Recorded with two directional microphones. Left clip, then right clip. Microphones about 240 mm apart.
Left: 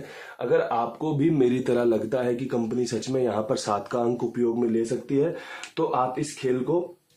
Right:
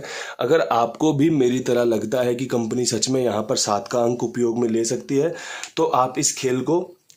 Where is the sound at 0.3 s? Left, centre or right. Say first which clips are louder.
Right 5 dB; right.